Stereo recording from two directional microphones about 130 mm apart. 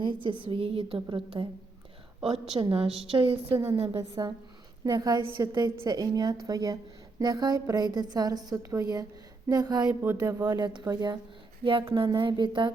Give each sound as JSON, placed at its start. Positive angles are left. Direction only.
{"t": 0.0, "sound": "a woman's voice", "side_deg": -40}
{"t": 3.9, "sound": "a woman's voice", "side_deg": -30}
{"t": 9.8, "sound": "speech", "side_deg": -15}
{"t": 10.2, "sound": "a woman's voice", "side_deg": -30}
{"t": 11.6, "sound": "a woman's voice", "side_deg": -40}